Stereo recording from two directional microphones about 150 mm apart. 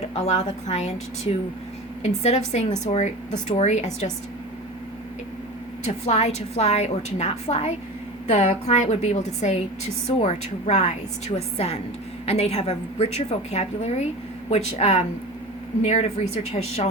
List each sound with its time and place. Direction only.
0.0 s a woman's voice: 45° left (ahead or behind)
5.8 s a woman's voice: 50° left (ahead or behind)